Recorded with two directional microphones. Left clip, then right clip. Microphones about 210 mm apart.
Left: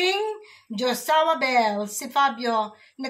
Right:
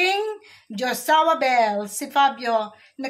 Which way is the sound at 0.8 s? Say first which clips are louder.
Right 2 dB; 35° right (ahead or behind).